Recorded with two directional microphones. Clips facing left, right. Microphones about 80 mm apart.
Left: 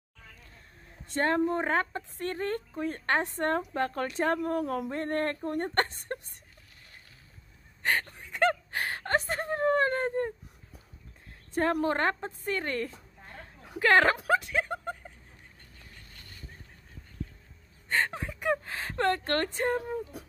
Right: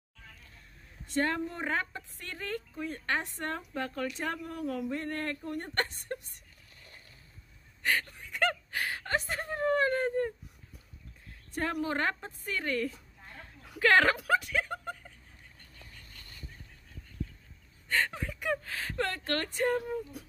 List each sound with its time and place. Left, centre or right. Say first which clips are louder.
1.0 s a woman's voice: left 4 dB; left
7.8 s gasp: left 2 dB; left
11.5 s speech: left 5 dB; left
13.6 s a sound: left 1 dB; left
17.8 s speech: left 2 dB; left